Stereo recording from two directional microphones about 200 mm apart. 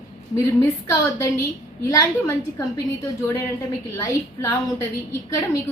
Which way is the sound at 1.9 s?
15° left (ahead or behind).